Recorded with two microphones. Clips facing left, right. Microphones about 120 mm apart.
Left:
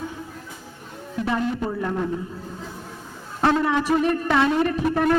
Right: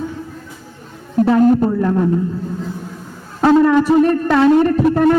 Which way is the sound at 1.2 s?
40° right (ahead or behind).